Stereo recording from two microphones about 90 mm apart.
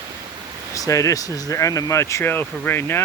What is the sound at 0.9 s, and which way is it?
Speech, 35° left (ahead or behind).